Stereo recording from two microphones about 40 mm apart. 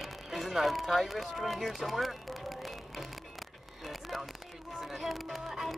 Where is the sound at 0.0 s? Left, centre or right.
Centre.